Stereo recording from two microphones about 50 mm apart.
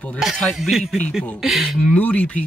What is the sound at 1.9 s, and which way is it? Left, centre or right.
Speech, left.